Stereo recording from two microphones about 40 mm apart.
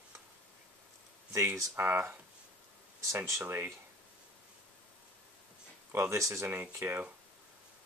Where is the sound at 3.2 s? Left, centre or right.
Right.